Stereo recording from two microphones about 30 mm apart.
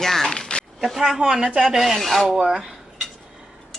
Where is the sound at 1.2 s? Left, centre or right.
Right.